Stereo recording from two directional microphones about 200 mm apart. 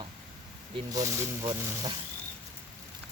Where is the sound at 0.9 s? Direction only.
15° right (ahead or behind).